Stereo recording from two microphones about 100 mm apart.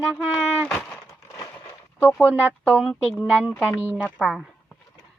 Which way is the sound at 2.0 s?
25° left (ahead or behind).